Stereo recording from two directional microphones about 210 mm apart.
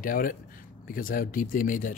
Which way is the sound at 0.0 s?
40° left (ahead or behind).